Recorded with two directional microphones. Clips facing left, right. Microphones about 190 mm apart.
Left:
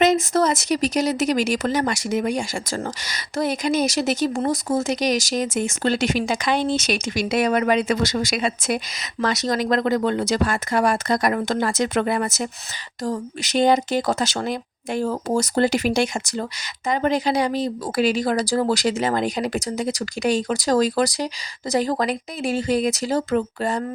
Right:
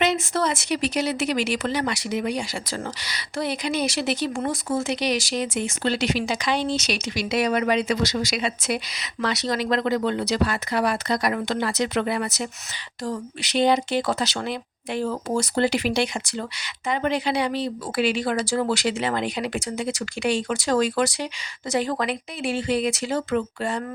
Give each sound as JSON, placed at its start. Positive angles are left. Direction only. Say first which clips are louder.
{"t": 0.0, "sound": "speech", "louder": "left 5 dB", "side_deg": 40}